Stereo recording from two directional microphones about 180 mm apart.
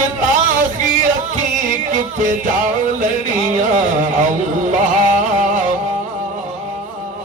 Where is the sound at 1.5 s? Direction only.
45° right (ahead or behind).